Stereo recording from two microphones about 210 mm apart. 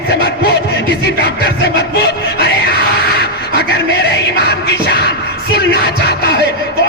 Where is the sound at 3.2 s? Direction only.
50° left (ahead or behind).